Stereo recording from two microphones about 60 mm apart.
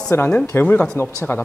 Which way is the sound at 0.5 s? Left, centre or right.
Left.